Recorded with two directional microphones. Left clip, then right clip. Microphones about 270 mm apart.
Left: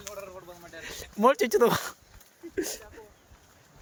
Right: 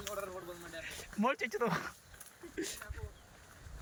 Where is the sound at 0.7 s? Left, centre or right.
Centre.